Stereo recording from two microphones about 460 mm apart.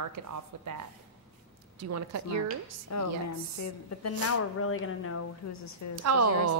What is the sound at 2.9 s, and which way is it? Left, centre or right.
A woman's voice, left.